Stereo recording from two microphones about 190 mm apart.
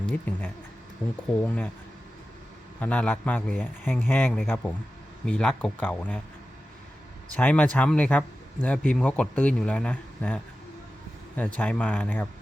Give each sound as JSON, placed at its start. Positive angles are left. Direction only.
{"t": 0.1, "sound": "a man's voice", "side_deg": 10}
{"t": 2.8, "sound": "a man's voice", "side_deg": 5}
{"t": 7.3, "sound": "a man's voice", "side_deg": 5}